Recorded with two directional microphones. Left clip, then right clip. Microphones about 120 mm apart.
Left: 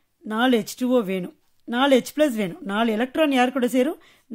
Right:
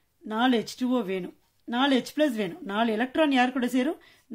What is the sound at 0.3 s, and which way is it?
Speech, 50° left (ahead or behind).